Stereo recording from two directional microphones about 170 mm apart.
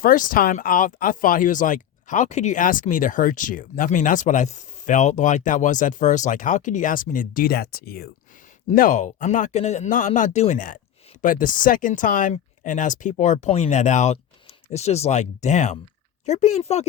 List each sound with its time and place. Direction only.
0.0 s speech: 55° left (ahead or behind)
8.7 s speech: 50° left (ahead or behind)